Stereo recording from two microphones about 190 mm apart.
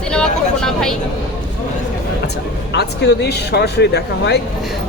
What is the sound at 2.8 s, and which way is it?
Speech, 60° left (ahead or behind).